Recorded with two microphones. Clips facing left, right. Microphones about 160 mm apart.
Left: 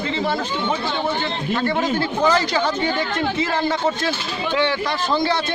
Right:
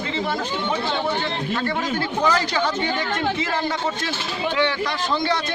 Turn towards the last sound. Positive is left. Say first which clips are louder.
# left 2 dB
turn(degrees=30)  # may be behind; listen again after turning